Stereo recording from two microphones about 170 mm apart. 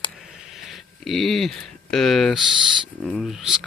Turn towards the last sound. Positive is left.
turn(degrees=0)  # may be behind; listen again after turning